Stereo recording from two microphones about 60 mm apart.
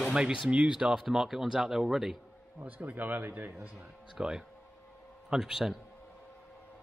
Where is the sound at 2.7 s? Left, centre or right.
Right.